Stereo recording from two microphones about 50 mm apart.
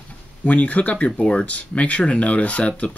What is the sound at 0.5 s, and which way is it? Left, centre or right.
Speech, left.